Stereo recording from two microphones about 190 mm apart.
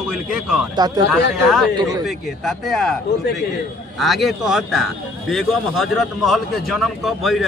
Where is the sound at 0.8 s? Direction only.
20° right (ahead or behind).